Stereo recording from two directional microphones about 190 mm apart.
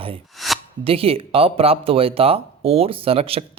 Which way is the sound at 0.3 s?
Centre (ahead or behind).